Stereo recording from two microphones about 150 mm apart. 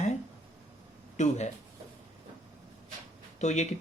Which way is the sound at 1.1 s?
55° left (ahead or behind).